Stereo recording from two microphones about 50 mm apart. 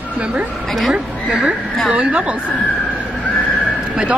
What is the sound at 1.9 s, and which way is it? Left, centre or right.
Speech, right.